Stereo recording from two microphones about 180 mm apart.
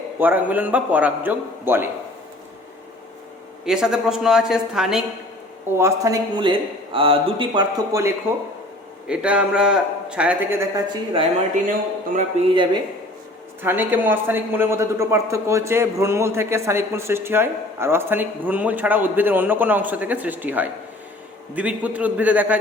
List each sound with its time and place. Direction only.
0.2 s speech: 10° right (ahead or behind)
3.7 s speech: 5° right (ahead or behind)
5.7 s a man's voice: 15° right (ahead or behind)
9.0 s speech: 5° right (ahead or behind)
11.6 s speech: 45° right (ahead or behind)
13.6 s speech: 10° right (ahead or behind)